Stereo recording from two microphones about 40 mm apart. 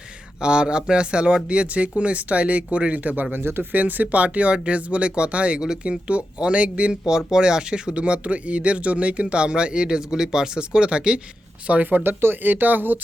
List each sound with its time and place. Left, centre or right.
0.4 s speech: right
3.3 s speech: right
3.7 s speech: right
7.1 s speech: centre
11.7 s speech: right